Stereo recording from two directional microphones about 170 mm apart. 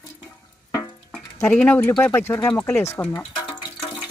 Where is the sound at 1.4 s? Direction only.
10° left (ahead or behind).